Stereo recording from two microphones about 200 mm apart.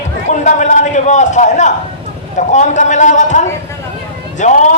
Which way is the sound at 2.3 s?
35° left (ahead or behind).